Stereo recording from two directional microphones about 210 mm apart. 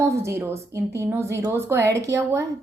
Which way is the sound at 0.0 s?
15° right (ahead or behind).